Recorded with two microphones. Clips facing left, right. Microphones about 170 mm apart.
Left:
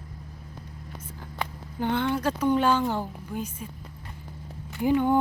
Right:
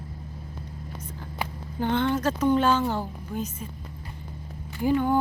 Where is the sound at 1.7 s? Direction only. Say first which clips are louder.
Right 2 dB; 10° left (ahead or behind).